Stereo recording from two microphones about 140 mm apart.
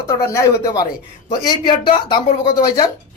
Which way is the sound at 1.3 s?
35° left (ahead or behind).